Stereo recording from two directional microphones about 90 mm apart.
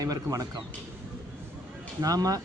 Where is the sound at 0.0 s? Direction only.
40° right (ahead or behind).